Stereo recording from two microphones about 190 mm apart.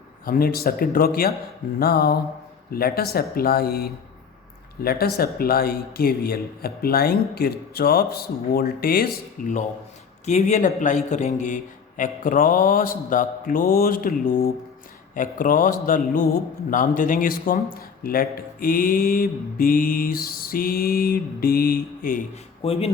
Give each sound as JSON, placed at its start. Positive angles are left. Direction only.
{"t": 0.3, "sound": "a man's voice", "side_deg": 50}
{"t": 1.8, "sound": "a sound", "side_deg": 55}
{"t": 2.7, "sound": "a man's voice", "side_deg": 50}
{"t": 10.2, "sound": "a man's voice", "side_deg": 35}
{"t": 15.1, "sound": "a man's voice", "side_deg": 45}
{"t": 22.6, "sound": "speech", "side_deg": 30}